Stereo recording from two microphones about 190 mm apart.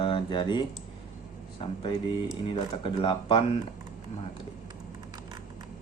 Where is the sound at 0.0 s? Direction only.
25° left (ahead or behind).